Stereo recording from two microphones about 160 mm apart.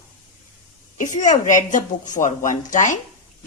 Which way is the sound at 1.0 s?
50° left (ahead or behind).